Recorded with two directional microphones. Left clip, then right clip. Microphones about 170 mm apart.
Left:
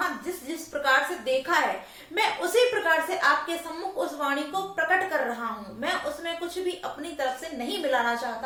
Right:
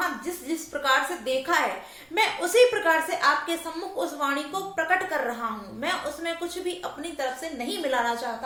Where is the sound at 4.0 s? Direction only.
20° right (ahead or behind).